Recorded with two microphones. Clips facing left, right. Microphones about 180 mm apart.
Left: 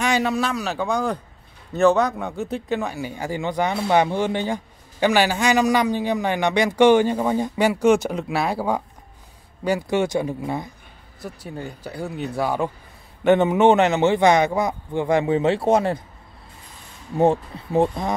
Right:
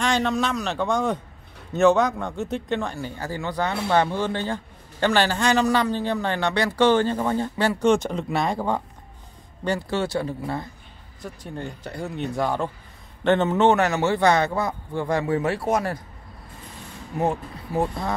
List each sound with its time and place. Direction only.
0.0 s a man's voice: 5° left (ahead or behind); by 16.0 s 25° left (ahead or behind)
17.2 s a man's voice: 25° left (ahead or behind)